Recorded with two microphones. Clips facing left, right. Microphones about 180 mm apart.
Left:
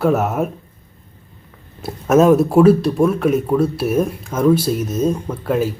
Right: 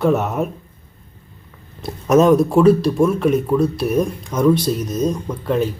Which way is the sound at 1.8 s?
5° left (ahead or behind).